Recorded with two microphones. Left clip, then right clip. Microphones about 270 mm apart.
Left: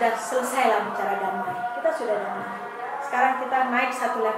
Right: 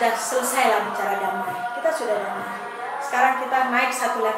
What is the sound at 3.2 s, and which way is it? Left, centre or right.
A woman's voice, centre.